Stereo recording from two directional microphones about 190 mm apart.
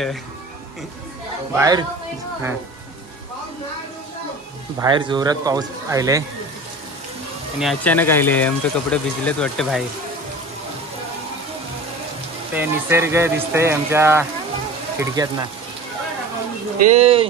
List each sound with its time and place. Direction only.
1.5 s speech: 20° right (ahead or behind)
4.7 s speech: 25° right (ahead or behind)
7.6 s speech: 10° left (ahead or behind)
12.5 s speech: 15° right (ahead or behind)
16.8 s speech: 35° right (ahead or behind)